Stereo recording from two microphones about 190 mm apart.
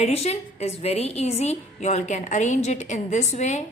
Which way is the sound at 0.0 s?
35° left (ahead or behind).